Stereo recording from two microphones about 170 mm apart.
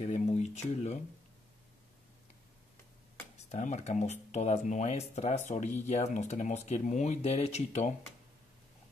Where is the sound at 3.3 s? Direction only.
40° left (ahead or behind).